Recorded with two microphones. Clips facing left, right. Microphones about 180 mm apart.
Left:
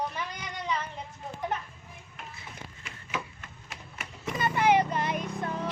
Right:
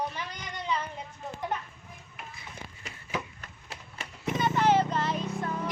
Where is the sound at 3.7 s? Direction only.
30° right (ahead or behind).